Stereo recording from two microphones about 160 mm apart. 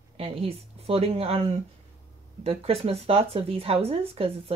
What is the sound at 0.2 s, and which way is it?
Speech, 35° right (ahead or behind).